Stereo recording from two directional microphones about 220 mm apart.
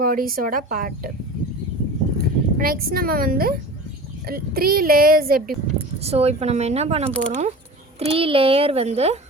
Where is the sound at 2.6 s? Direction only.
40° right (ahead or behind).